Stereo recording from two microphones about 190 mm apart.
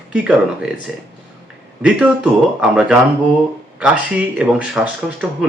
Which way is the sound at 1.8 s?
5° right (ahead or behind).